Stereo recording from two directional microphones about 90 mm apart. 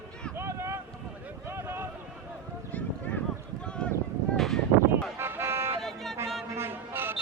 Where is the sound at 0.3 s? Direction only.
30° right (ahead or behind).